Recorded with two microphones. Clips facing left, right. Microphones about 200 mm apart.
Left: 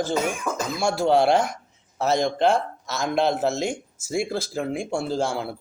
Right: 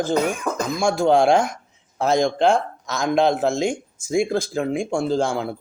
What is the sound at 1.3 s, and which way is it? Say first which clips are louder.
Speech: right 3 dB; 50° right (ahead or behind).